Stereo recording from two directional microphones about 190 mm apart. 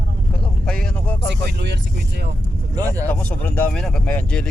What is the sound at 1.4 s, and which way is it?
Speech, 65° right (ahead or behind).